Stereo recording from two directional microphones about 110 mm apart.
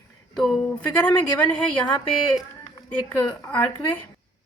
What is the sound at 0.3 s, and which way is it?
Speech, centre (ahead or behind).